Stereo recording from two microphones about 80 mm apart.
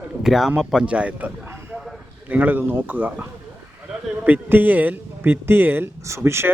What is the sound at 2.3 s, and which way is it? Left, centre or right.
Speech, right.